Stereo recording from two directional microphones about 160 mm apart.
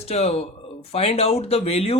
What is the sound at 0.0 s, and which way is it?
Speech, 40° left (ahead or behind).